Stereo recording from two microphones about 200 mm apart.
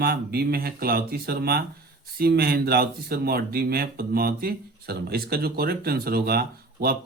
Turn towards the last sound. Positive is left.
turn(degrees=-50)  # may be behind; listen again after turning